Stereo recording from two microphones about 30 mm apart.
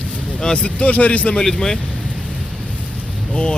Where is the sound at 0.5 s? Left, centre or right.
Left.